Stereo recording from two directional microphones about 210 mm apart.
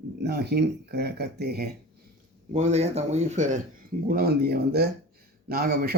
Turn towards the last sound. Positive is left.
turn(degrees=-45)  # may be behind; listen again after turning